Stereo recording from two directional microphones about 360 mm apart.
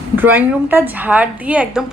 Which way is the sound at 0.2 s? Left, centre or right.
Centre.